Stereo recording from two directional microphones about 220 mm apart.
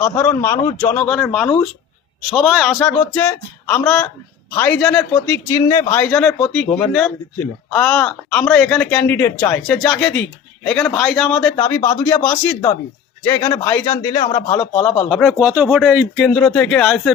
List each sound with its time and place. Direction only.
0.2 s speech: 10° left (ahead or behind)
1.1 s a man's voice: 5° left (ahead or behind)
2.7 s a man's voice: 10° left (ahead or behind)
14.5 s a man's voice: 5° left (ahead or behind)